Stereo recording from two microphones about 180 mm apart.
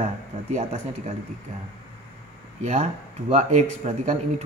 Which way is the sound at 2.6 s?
40° right (ahead or behind).